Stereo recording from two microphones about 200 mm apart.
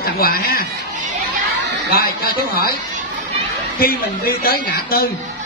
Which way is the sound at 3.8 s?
50° left (ahead or behind).